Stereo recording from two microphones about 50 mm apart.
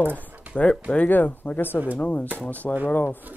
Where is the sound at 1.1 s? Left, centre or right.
Left.